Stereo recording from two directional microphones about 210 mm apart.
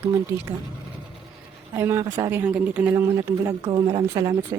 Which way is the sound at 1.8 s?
10° right (ahead or behind).